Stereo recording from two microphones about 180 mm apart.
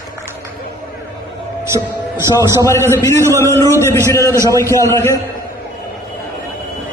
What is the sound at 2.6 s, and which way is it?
A man's voice, 15° left (ahead or behind).